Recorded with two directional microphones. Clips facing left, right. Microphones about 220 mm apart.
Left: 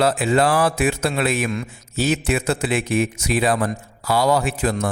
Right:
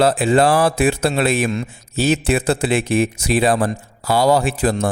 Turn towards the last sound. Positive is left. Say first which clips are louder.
# right 3 dB
turn(degrees=-30)  # may be behind; listen again after turning